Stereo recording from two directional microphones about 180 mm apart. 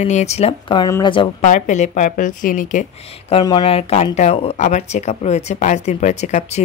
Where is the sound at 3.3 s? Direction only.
25° left (ahead or behind).